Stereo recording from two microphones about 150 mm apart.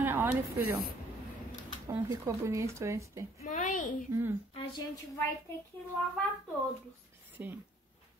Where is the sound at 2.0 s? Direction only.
20° right (ahead or behind).